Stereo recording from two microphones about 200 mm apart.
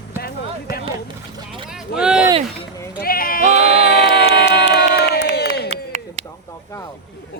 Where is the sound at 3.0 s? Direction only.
45° left (ahead or behind).